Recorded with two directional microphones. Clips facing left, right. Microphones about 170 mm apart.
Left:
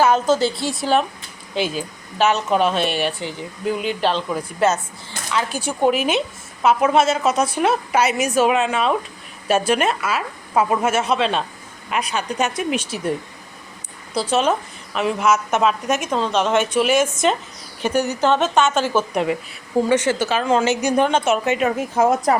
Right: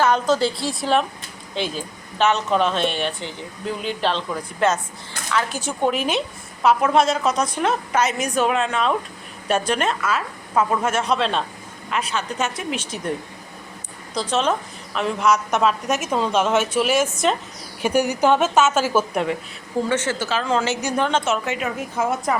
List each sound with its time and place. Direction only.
0.0 s a woman's voice: 5° left (ahead or behind)
11.9 s a woman's voice: 15° left (ahead or behind)
17.8 s a woman's voice: 10° right (ahead or behind)
19.9 s a woman's voice: 15° left (ahead or behind)
21.6 s a woman's voice: 40° left (ahead or behind)